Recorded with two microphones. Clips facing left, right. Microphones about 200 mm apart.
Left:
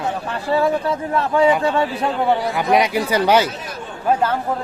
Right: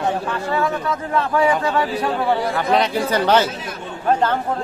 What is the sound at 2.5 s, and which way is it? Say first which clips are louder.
Speech: left 1 dB; 10° left (ahead or behind).